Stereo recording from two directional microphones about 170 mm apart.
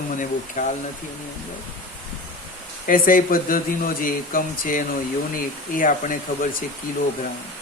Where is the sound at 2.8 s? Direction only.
55° left (ahead or behind).